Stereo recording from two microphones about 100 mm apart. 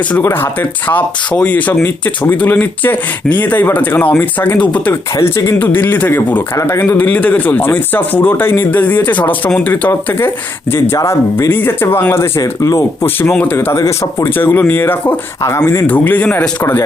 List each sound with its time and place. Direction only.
0.9 s speech: 15° left (ahead or behind)
6.6 s speech: 30° left (ahead or behind)
6.8 s speech: 15° left (ahead or behind)
12.4 s speech: 35° left (ahead or behind)
13.2 s speech: 15° left (ahead or behind)
13.7 s speech: 30° left (ahead or behind)
14.3 s speech: 20° left (ahead or behind)
15.9 s speech: 15° left (ahead or behind)